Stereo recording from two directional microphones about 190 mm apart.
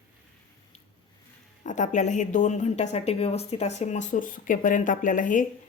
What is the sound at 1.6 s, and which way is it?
A woman's voice, 40° left (ahead or behind).